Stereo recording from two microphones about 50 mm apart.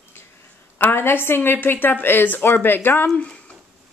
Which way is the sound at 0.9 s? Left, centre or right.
Left.